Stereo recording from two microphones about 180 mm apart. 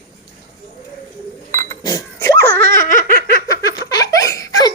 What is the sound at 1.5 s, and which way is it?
Chink, 45° right (ahead or behind).